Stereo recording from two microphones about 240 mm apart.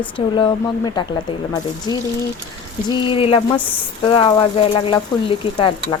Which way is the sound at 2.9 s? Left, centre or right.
Left.